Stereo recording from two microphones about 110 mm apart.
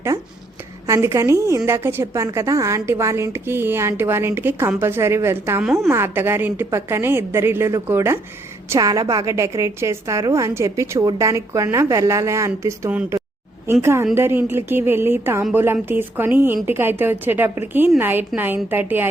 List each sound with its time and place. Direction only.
0.9 s a woman's voice: 25° right (ahead or behind)